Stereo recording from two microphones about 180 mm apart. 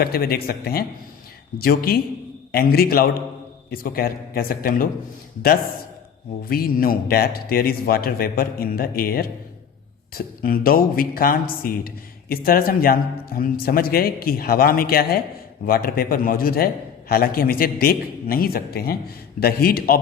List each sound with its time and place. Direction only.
0.0 s a man's voice: 55° left (ahead or behind)
6.4 s a man's voice: 55° left (ahead or behind)